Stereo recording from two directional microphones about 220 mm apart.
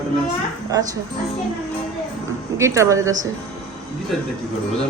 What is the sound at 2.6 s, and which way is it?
Speech, 15° right (ahead or behind).